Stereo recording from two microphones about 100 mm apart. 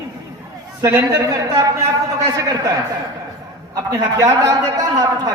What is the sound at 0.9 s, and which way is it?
Speech, 40° right (ahead or behind).